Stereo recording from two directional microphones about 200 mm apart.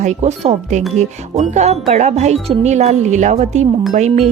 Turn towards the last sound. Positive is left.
turn(degrees=-35)  # may be behind; listen again after turning